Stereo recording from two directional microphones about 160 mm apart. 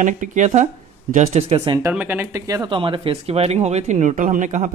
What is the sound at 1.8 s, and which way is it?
Speech, 10° right (ahead or behind).